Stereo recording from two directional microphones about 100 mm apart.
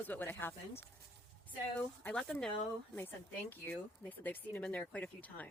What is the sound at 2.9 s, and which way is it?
Speech, 20° left (ahead or behind).